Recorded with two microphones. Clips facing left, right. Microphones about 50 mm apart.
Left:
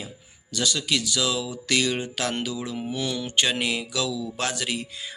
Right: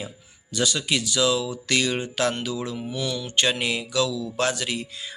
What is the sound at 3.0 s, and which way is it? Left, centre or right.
Speech, left.